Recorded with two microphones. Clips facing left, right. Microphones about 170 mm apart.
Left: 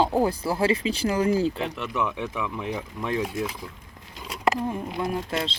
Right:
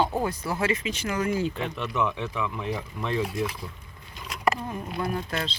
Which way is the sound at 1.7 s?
Centre (ahead or behind).